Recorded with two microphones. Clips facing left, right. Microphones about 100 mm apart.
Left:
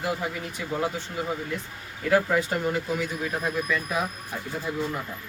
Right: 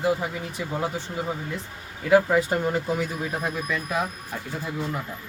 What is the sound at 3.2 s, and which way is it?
Speech, 20° right (ahead or behind).